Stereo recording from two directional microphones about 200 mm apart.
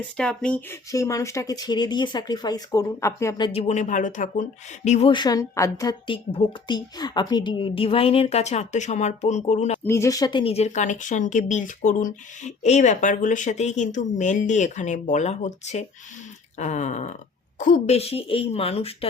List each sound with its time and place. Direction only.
0.2 s a woman's voice: 5° left (ahead or behind); by 4.4 s 40° left (ahead or behind)
4.9 s a woman's voice: 30° left (ahead or behind)
9.8 s a woman's voice: 15° left (ahead or behind); by 18.9 s 30° left (ahead or behind)